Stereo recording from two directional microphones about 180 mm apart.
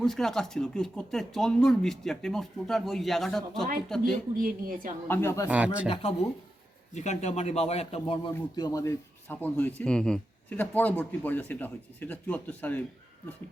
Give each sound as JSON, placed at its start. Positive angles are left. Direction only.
{"t": 0.0, "sound": "speech", "side_deg": 0}
{"t": 4.4, "sound": "a woman's voice", "side_deg": -50}
{"t": 5.0, "sound": "speech", "side_deg": 10}
{"t": 5.5, "sound": "speech", "side_deg": -5}
{"t": 5.9, "sound": "speech", "side_deg": 30}